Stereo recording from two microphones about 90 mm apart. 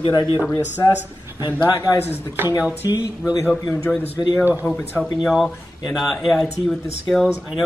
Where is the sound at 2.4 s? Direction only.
20° right (ahead or behind).